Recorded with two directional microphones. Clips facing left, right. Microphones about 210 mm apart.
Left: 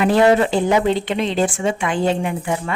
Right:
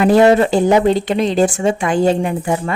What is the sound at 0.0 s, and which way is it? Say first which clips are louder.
A woman's voice: right 4 dB; 40° right (ahead or behind).